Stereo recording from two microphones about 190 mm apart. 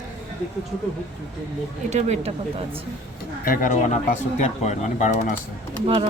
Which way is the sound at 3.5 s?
45° left (ahead or behind).